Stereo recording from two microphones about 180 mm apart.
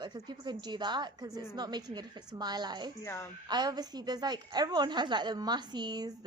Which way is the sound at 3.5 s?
25° right (ahead or behind).